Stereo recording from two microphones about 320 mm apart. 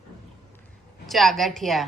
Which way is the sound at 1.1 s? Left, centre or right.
Centre.